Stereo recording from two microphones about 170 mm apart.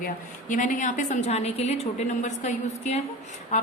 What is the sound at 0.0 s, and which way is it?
A woman's voice, 50° left (ahead or behind).